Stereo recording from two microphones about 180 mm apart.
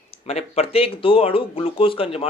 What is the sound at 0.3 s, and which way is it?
Speech, 35° left (ahead or behind).